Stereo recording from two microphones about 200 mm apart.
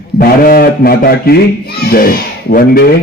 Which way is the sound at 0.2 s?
50° left (ahead or behind).